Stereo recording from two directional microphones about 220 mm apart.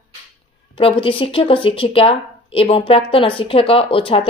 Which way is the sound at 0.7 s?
25° left (ahead or behind).